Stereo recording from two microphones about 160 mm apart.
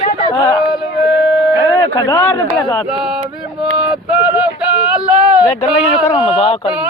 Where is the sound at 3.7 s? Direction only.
5° right (ahead or behind).